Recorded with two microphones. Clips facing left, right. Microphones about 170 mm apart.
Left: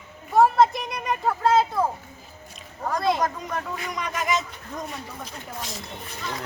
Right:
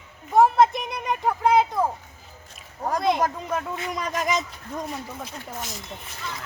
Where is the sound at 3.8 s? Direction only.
35° right (ahead or behind).